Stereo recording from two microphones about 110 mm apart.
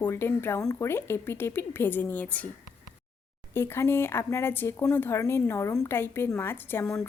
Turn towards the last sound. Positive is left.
turn(degrees=20)  # may be behind; listen again after turning